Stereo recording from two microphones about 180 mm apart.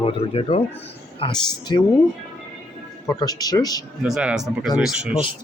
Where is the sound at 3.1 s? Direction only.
20° left (ahead or behind).